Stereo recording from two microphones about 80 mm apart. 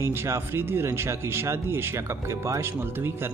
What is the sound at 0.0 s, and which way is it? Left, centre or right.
Speech, right.